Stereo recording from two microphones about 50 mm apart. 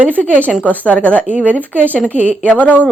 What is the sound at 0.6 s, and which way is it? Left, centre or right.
Speech, left.